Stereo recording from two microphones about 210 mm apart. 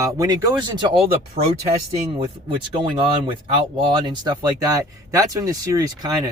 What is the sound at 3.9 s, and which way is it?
Speech, 20° right (ahead or behind).